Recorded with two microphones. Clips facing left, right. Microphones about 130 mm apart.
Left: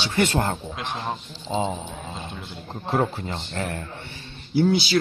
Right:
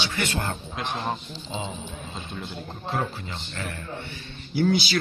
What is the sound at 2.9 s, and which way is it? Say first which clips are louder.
Speech: left 6 dB; 45° left (ahead or behind).